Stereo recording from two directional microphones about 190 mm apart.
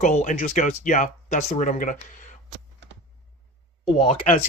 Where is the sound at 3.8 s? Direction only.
30° left (ahead or behind).